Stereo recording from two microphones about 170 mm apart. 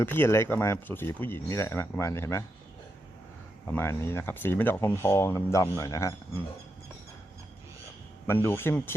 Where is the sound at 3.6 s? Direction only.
15° left (ahead or behind).